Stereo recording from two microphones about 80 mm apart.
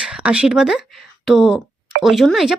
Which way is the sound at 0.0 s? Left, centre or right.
Centre.